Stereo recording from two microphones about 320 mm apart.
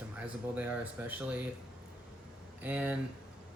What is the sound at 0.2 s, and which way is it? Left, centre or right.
Speech, centre.